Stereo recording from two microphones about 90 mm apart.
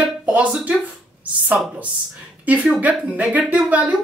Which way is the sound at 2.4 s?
15° right (ahead or behind).